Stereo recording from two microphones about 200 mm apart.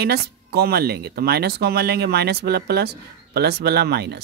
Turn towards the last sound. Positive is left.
turn(degrees=-55)  # may be behind; listen again after turning